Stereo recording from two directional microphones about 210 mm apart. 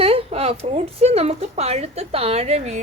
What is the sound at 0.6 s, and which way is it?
A woman's voice, 30° right (ahead or behind).